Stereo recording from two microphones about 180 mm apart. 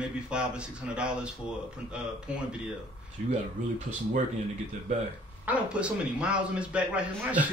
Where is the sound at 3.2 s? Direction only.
50° right (ahead or behind).